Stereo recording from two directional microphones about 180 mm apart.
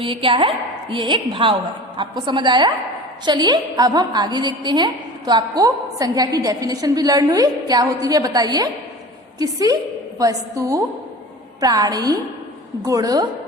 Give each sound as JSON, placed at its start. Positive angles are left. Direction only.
{"t": 0.0, "sound": "a woman's voice", "side_deg": -30}